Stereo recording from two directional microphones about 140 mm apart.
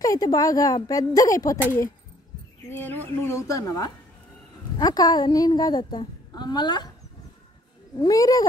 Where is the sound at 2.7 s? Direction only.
15° left (ahead or behind); by 6.9 s 30° left (ahead or behind).